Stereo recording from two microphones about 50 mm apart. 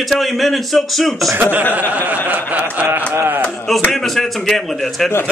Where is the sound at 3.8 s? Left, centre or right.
Centre.